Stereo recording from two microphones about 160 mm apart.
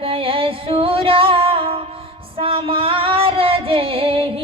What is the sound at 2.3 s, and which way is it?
Female singing, 35° right (ahead or behind).